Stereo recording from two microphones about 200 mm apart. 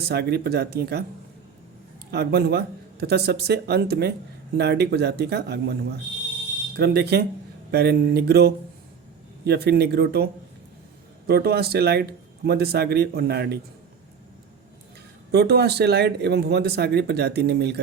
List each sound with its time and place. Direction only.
0.0 s speech: 55° right (ahead or behind)
2.0 s speech: 55° right (ahead or behind)
6.7 s speech: 55° right (ahead or behind)
11.3 s speech: 50° right (ahead or behind)
15.3 s speech: 55° right (ahead or behind)